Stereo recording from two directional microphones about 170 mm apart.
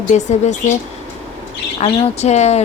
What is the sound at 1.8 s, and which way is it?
Speech, 40° left (ahead or behind).